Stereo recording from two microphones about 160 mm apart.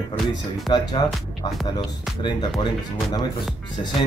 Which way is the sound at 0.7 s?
30° left (ahead or behind).